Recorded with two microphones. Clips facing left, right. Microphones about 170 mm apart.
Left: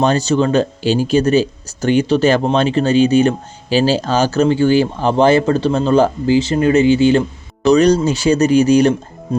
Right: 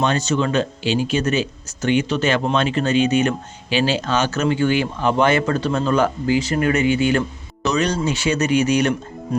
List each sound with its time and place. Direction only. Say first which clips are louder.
0.0 s speech: left 5 dB; 35° left (ahead or behind)